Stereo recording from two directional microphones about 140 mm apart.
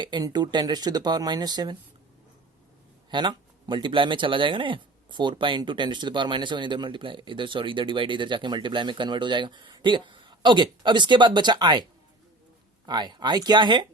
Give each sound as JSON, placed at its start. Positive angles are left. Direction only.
{"t": 0.0, "sound": "speech", "side_deg": -30}
{"t": 3.1, "sound": "speech", "side_deg": -35}